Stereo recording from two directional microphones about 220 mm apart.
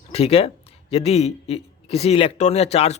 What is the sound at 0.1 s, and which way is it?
Speech, 25° left (ahead or behind).